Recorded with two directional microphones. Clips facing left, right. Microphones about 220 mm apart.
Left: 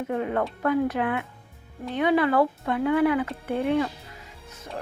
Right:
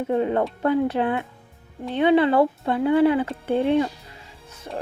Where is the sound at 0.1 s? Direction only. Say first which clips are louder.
Right 5 dB; 30° right (ahead or behind).